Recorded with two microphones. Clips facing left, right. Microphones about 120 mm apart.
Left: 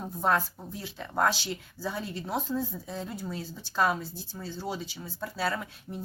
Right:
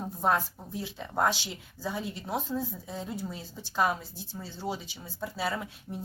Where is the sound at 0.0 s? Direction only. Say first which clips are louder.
Even; 15° right (ahead or behind).